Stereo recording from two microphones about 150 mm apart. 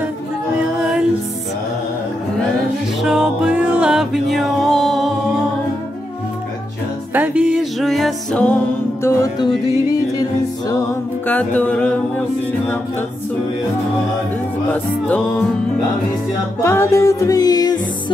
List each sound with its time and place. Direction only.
3.0 s music: 5° right (ahead or behind)
7.2 s music: 10° right (ahead or behind)
9.0 s music: 20° left (ahead or behind)
10.7 s music: 15° left (ahead or behind)
14.7 s music: 10° left (ahead or behind)
16.6 s music: 20° left (ahead or behind)